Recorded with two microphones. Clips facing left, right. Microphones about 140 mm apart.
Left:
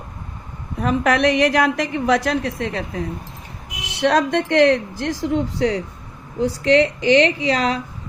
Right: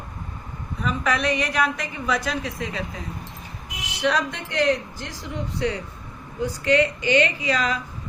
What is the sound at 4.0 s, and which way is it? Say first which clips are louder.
A woman's voice: left 7 dB; 70° left (ahead or behind).